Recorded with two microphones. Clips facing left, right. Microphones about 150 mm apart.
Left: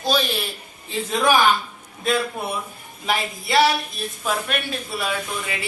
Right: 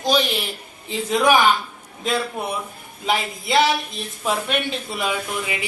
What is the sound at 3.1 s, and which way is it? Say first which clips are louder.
A woman's voice: right 2 dB; 20° right (ahead or behind).